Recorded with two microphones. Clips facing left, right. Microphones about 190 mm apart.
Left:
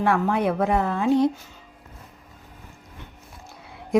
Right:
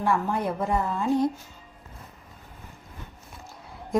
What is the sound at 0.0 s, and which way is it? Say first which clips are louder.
A woman's voice: left 4 dB; 75° left (ahead or behind).